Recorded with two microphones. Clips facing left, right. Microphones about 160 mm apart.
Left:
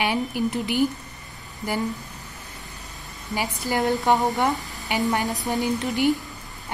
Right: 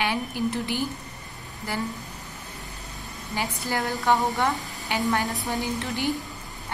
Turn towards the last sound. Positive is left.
turn(degrees=15)  # may be behind; listen again after turning